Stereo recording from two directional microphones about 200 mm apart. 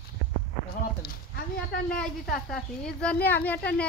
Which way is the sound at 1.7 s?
50° left (ahead or behind).